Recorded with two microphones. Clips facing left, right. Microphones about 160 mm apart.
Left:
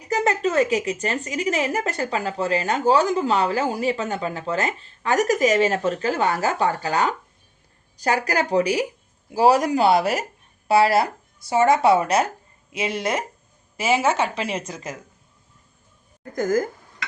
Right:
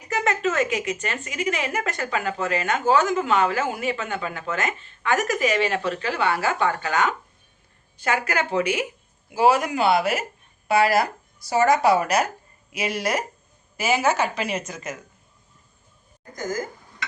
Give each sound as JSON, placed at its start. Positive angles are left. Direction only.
{"t": 0.1, "sound": "a woman's voice", "side_deg": 35}
{"t": 16.3, "sound": "speech", "side_deg": 55}